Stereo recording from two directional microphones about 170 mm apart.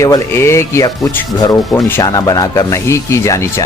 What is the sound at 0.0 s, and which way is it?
Speech, 15° left (ahead or behind).